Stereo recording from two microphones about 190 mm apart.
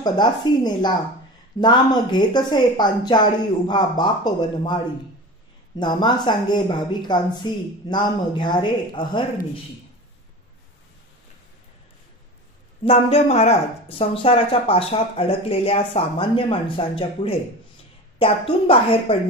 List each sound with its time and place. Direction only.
0.0 s speech: 20° left (ahead or behind)
12.8 s speech: 30° left (ahead or behind)